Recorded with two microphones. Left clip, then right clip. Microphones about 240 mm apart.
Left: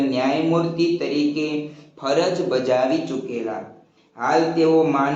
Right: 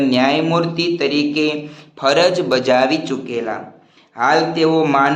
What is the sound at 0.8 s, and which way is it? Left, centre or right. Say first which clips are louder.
A man's voice: right 3 dB; right.